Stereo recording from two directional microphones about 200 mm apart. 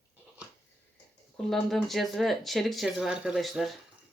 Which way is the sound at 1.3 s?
Centre (ahead or behind).